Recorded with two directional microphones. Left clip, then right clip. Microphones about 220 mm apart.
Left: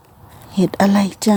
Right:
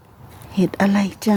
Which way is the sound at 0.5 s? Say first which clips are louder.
Left 3 dB; 5° left (ahead or behind).